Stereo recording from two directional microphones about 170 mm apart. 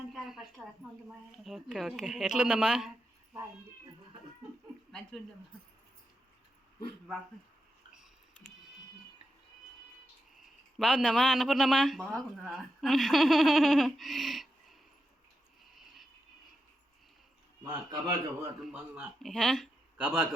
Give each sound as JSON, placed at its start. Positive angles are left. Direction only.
{"t": 0.1, "sound": "a sound", "side_deg": 0}
{"t": 1.3, "sound": "a man's voice", "side_deg": 0}
{"t": 4.9, "sound": "speech", "side_deg": 0}
{"t": 10.3, "sound": "a man's voice", "side_deg": 0}
{"t": 15.7, "sound": "a sound", "side_deg": 0}
{"t": 17.6, "sound": "a man's voice", "side_deg": -25}
{"t": 18.6, "sound": "a man's voice", "side_deg": -10}
{"t": 19.2, "sound": "speech", "side_deg": 0}